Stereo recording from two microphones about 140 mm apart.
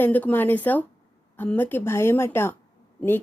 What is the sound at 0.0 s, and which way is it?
Speech, 15° left (ahead or behind).